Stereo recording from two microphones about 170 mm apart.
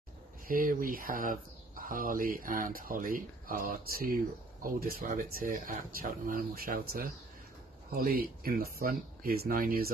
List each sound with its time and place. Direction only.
0.5 s speech: 55° right (ahead or behind)